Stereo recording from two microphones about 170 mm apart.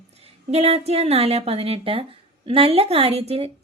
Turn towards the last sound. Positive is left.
turn(degrees=-35)  # may be behind; listen again after turning